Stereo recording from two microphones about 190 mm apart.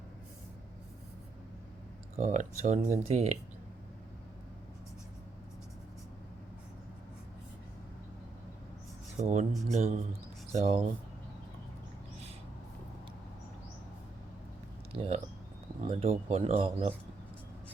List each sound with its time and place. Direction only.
2.1 s speech: 40° right (ahead or behind)
9.2 s speech: 40° right (ahead or behind)
9.5 s speech: centre (ahead or behind)
9.7 s speech: 35° right (ahead or behind)
14.9 s speech: 30° right (ahead or behind)